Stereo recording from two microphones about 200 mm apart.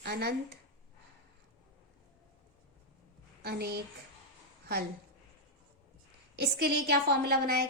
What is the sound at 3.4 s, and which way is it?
Speech, 55° right (ahead or behind).